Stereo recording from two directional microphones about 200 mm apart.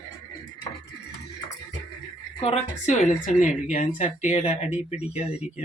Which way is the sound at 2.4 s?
30° left (ahead or behind).